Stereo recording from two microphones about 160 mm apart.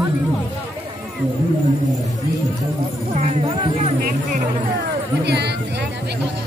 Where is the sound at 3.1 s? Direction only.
45° right (ahead or behind).